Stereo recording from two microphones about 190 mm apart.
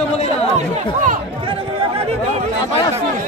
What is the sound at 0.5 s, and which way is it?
Chatter, 40° right (ahead or behind).